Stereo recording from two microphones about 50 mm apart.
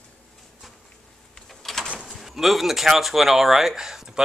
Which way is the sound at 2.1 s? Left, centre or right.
Centre.